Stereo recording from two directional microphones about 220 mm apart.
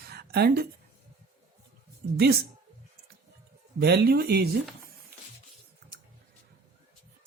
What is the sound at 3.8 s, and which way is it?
Speech, 45° right (ahead or behind).